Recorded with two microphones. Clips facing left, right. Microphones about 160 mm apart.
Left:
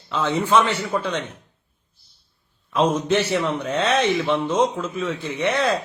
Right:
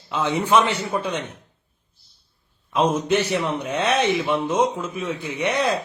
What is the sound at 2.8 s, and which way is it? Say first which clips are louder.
Speech: even; 10° right (ahead or behind).